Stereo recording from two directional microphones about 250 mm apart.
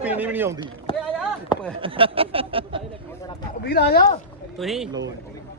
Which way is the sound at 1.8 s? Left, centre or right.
Right.